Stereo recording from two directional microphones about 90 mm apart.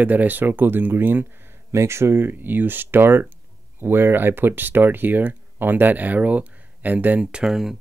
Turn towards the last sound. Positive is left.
turn(degrees=-5)  # may be behind; listen again after turning